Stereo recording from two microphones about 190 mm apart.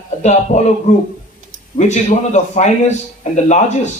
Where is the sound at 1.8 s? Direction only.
40° left (ahead or behind).